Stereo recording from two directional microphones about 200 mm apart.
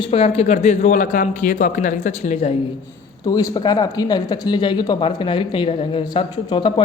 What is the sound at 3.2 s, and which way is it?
A man's voice, 20° left (ahead or behind).